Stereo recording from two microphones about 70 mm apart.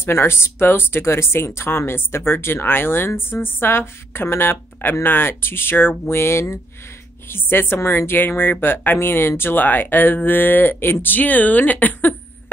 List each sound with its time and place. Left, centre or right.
0.0 s speech: left